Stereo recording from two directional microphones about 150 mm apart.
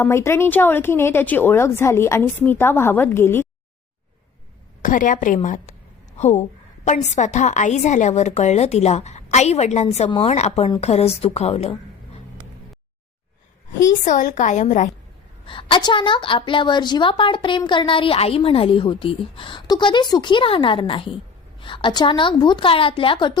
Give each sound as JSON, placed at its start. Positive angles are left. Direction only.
{"t": 0.0, "sound": "speech", "side_deg": 15}
{"t": 4.8, "sound": "a woman's voice", "side_deg": 60}
{"t": 13.8, "sound": "a woman's voice", "side_deg": 55}
{"t": 15.4, "sound": "a woman's voice", "side_deg": 35}